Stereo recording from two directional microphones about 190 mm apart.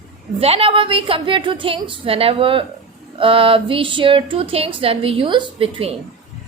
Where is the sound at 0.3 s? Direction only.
30° right (ahead or behind).